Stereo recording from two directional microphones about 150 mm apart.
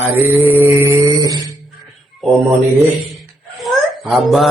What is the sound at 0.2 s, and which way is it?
Mantra, 15° right (ahead or behind).